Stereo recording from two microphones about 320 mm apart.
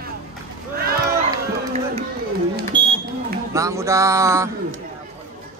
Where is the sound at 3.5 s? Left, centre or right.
Centre.